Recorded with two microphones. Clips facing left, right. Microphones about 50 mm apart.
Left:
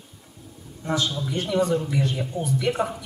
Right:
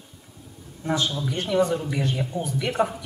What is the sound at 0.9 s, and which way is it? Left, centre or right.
Speech, centre.